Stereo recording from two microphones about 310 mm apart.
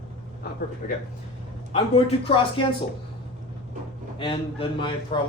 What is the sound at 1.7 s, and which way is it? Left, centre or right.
Speech, centre.